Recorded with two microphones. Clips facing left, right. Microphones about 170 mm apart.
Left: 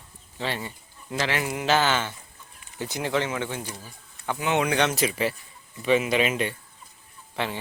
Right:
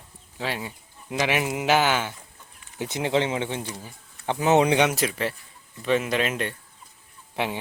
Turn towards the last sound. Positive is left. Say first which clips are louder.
# right 2 dB
turn(degrees=-15)  # may be behind; listen again after turning